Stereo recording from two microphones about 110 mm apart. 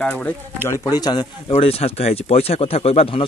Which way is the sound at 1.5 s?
65° left (ahead or behind).